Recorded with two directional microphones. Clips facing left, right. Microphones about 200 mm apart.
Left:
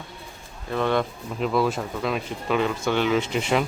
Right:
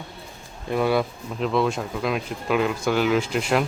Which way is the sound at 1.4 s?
Centre (ahead or behind).